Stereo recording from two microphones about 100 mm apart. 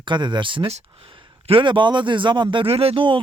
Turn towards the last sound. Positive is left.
turn(degrees=-60)  # may be behind; listen again after turning